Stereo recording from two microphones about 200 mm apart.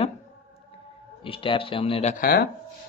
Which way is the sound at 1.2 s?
25° left (ahead or behind).